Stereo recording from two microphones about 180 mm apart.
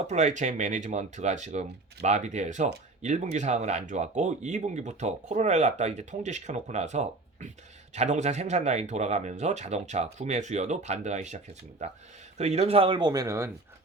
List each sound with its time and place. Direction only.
0.1 s speech: 40° right (ahead or behind)
12.4 s speech: 35° right (ahead or behind); by 13.5 s 15° right (ahead or behind)